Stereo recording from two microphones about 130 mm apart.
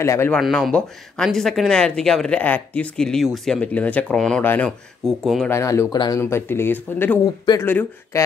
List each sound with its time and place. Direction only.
0.0 s speech: 20° left (ahead or behind)
0.3 s speech: 5° left (ahead or behind)
5.5 s speech: 20° left (ahead or behind)
6.3 s speech: 15° left (ahead or behind)